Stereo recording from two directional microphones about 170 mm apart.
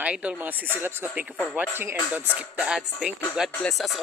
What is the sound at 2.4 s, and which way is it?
Music, 5° right (ahead or behind).